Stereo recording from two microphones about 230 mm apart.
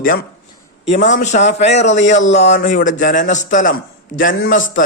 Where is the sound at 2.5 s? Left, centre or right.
Left.